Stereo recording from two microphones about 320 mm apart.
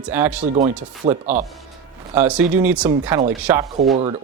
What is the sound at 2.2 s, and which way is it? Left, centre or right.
Speech, centre.